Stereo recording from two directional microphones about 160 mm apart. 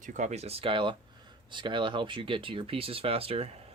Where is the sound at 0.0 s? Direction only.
50° right (ahead or behind).